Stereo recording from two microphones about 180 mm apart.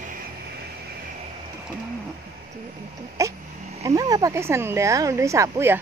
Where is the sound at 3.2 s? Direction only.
15° right (ahead or behind).